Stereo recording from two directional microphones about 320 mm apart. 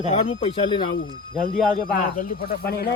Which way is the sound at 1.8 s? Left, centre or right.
Left.